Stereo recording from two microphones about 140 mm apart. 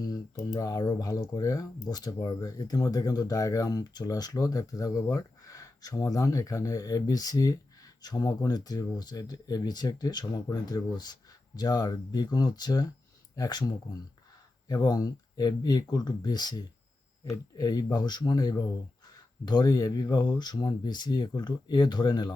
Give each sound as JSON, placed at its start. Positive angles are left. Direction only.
{"t": 0.0, "sound": "speech", "side_deg": 25}